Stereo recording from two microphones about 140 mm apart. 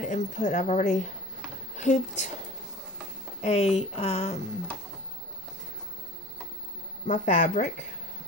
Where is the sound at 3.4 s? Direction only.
50° left (ahead or behind).